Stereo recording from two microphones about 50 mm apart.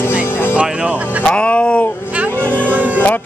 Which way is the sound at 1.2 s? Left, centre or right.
Left.